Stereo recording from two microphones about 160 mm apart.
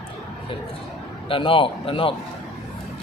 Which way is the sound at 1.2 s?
35° left (ahead or behind).